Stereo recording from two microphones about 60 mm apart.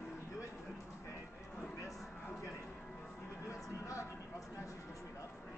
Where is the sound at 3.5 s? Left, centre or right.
Left.